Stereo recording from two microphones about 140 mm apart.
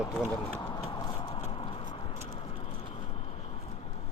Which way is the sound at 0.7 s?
30° left (ahead or behind).